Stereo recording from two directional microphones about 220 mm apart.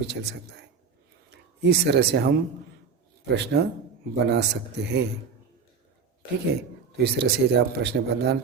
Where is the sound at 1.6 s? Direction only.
50° right (ahead or behind).